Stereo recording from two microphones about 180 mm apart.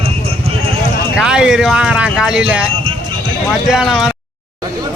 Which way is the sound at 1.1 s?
5° right (ahead or behind).